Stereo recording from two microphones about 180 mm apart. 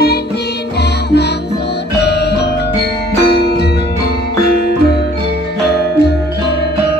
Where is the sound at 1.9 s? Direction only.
70° left (ahead or behind).